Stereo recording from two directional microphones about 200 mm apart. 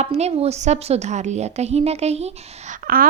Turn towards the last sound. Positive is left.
turn(degrees=-45)  # may be behind; listen again after turning